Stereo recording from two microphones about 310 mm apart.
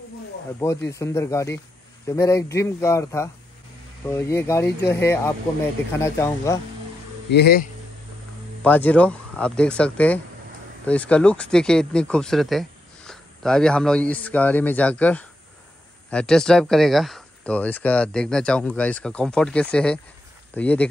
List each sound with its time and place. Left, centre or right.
0.8 s speech: centre
7.2 s speech: left
8.6 s speech: centre